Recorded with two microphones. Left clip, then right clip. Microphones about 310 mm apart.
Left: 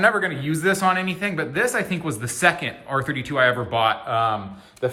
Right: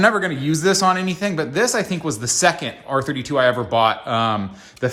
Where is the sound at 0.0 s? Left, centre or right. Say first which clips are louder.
Right 2 dB; centre.